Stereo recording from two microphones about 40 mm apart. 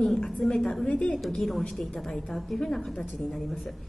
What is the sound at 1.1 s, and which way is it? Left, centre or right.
A woman's voice, centre.